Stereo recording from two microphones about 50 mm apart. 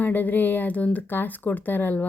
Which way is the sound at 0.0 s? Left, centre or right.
Left.